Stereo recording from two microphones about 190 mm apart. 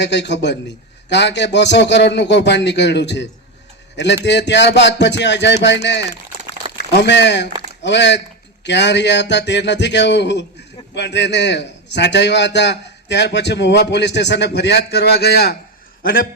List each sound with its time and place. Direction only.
0.0 s a man's voice: 65° left (ahead or behind)